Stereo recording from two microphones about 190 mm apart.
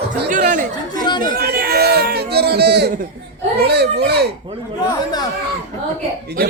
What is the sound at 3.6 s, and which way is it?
Children playing, 60° right (ahead or behind).